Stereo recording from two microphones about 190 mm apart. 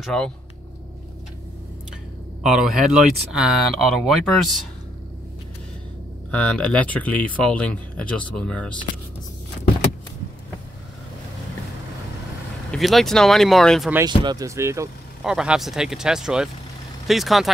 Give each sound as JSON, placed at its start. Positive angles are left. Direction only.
{"t": 0.0, "sound": "speech", "side_deg": 5}
{"t": 2.4, "sound": "speech", "side_deg": 0}
{"t": 6.3, "sound": "speech", "side_deg": 5}
{"t": 12.7, "sound": "speech", "side_deg": 0}
{"t": 14.0, "sound": "speech", "side_deg": -20}
{"t": 15.2, "sound": "speech", "side_deg": -5}